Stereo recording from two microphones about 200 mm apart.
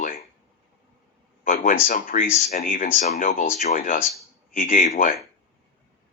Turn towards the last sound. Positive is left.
turn(degrees=45)  # may be behind; listen again after turning